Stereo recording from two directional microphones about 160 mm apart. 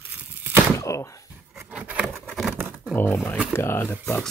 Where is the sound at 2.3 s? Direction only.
Centre (ahead or behind).